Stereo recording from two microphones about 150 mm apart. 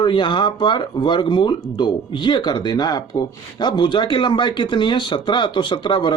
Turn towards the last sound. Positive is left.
turn(degrees=30)  # may be behind; listen again after turning